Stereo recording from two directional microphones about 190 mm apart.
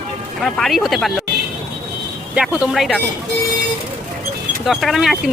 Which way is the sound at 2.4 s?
5° right (ahead or behind).